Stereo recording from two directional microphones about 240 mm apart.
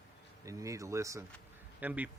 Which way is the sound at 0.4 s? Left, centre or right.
Centre.